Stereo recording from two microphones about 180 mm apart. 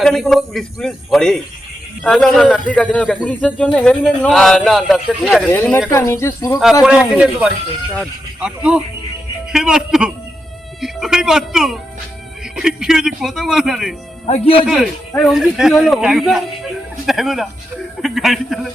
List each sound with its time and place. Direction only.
0.0 s speech: centre (ahead or behind)
6.8 s speech: 5° right (ahead or behind)
14.3 s a man's voice: 40° left (ahead or behind)
15.3 s speech: 5° right (ahead or behind)